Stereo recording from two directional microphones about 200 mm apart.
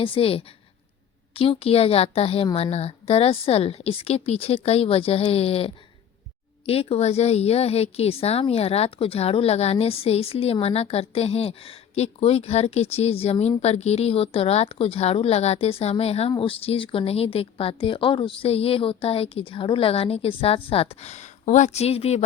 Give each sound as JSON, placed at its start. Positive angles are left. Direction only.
{"t": 0.0, "sound": "a woman's voice", "side_deg": 25}